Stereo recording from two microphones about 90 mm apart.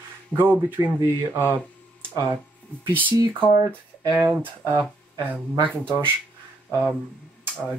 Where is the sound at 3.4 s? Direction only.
55° right (ahead or behind).